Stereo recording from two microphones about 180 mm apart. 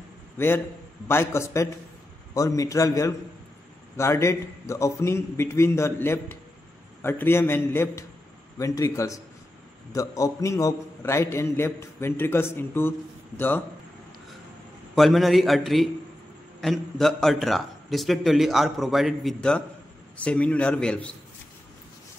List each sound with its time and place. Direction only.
1.0 s a man's voice: 15° left (ahead or behind)
15.0 s a man's voice: centre (ahead or behind)